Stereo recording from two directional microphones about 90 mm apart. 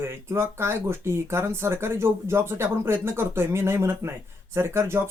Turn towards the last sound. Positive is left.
turn(degrees=-30)  # may be behind; listen again after turning